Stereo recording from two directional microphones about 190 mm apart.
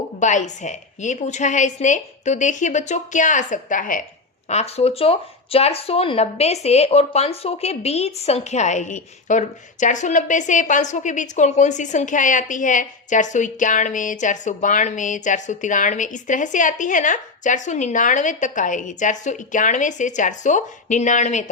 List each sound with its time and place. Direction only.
0.2 s a woman's voice: 40° left (ahead or behind)
4.4 s a woman's voice: 35° left (ahead or behind)